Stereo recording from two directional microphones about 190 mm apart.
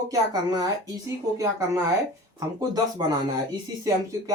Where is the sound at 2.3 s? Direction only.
20° right (ahead or behind).